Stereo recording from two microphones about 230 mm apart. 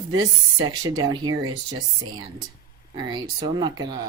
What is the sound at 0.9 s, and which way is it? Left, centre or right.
Speech, centre.